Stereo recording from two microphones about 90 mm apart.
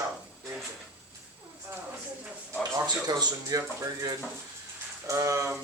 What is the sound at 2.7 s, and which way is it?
Speech, 45° right (ahead or behind).